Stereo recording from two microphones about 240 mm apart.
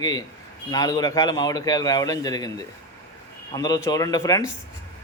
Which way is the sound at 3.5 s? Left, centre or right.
Centre.